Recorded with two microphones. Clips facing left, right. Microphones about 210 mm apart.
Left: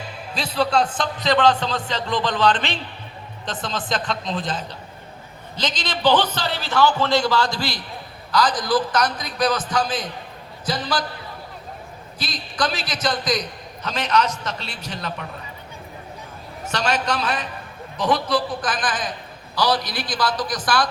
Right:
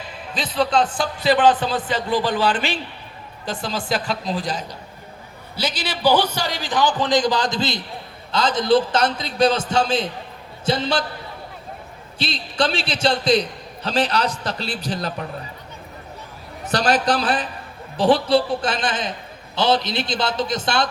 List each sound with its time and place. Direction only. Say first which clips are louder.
0.5 s a man's voice: right 1 dB; 5° right (ahead or behind)
3.7 s a man's voice: right 2 dB; 5° right (ahead or behind); by 11.0 s 25° right (ahead or behind)
12.2 s a man's voice: right 3 dB; 30° right (ahead or behind)
16.6 s a man's voice: right 4 dB; 35° right (ahead or behind)